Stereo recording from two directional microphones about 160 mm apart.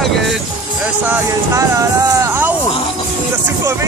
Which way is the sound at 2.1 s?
20° right (ahead or behind).